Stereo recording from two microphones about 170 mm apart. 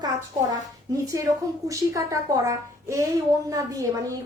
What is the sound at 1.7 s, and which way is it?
A woman's voice, 20° right (ahead or behind).